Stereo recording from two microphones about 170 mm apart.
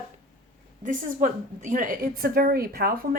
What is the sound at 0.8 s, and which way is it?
A woman's voice, 50° right (ahead or behind).